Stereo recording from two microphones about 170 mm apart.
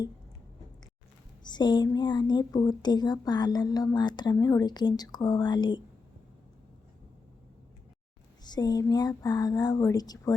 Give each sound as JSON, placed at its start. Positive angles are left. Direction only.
{"t": 1.5, "sound": "speech", "side_deg": 25}
{"t": 8.4, "sound": "speech", "side_deg": 25}